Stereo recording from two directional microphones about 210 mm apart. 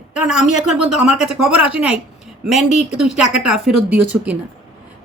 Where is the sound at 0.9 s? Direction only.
5° right (ahead or behind).